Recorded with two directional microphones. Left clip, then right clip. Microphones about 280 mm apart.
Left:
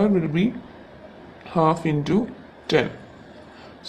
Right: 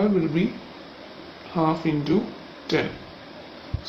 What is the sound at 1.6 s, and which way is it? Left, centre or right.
Speech, centre.